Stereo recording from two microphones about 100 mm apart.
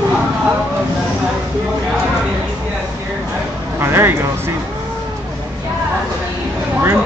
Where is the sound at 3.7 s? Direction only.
25° right (ahead or behind).